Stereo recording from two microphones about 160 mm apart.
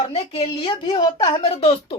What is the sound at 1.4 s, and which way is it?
Speech, 40° left (ahead or behind).